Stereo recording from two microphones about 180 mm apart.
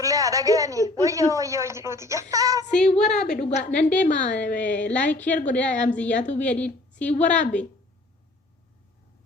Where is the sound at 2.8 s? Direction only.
40° left (ahead or behind).